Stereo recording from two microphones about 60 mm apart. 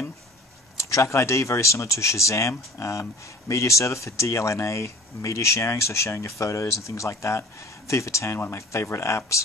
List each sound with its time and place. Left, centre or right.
0.7 s speech: left